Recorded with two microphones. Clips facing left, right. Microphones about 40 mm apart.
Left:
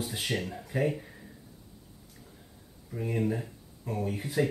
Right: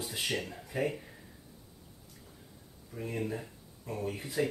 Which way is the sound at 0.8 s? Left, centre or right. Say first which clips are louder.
Left 3 dB; centre.